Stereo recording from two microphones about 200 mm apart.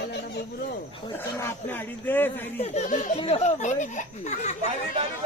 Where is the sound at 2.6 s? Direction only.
35° left (ahead or behind).